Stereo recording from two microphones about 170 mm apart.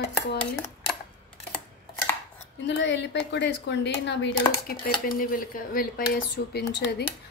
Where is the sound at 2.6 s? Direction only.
90° left.